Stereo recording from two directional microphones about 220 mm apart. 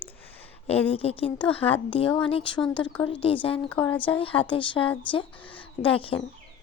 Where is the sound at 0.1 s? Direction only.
10° left (ahead or behind).